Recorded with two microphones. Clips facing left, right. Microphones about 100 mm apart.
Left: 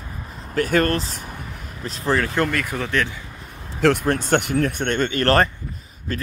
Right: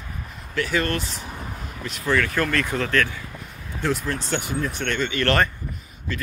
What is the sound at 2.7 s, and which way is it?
Speech, 15° left (ahead or behind).